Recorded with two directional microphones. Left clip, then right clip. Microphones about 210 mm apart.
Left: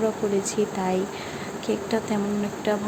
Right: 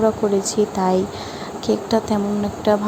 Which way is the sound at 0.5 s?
15° right (ahead or behind).